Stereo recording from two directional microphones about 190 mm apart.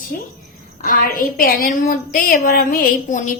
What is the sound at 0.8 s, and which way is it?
A woman's voice, 45° left (ahead or behind).